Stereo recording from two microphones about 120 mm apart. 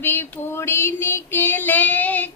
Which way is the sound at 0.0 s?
20° left (ahead or behind).